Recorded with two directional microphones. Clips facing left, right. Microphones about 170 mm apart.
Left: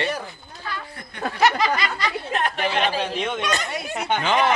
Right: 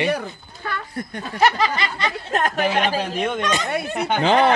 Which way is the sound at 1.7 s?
25° right (ahead or behind).